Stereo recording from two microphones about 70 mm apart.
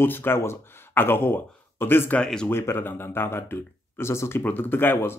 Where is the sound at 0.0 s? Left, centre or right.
Left.